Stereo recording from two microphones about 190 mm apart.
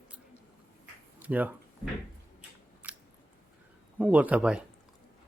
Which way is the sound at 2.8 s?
10° right (ahead or behind).